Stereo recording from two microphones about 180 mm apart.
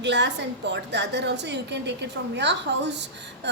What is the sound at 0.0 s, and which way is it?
A woman's voice, 75° right (ahead or behind).